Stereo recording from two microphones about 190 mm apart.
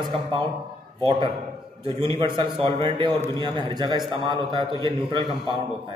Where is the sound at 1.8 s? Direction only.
25° right (ahead or behind).